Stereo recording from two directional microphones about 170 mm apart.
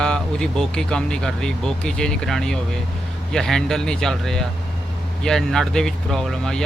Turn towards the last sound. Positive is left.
turn(degrees=5)  # may be behind; listen again after turning